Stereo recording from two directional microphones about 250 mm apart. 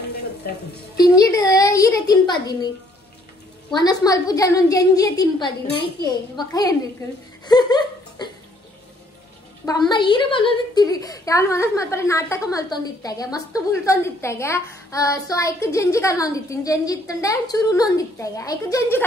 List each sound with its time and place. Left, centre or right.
0.5 s speech: left
0.9 s a woman's voice: centre
3.7 s a woman's voice: centre
7.4 s a sound: centre
9.7 s a woman's voice: centre